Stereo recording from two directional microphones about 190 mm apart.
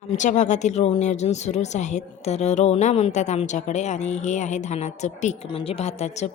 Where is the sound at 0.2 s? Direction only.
40° left (ahead or behind).